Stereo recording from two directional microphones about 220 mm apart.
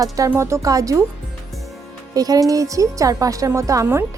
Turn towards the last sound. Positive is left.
turn(degrees=-15)  # may be behind; listen again after turning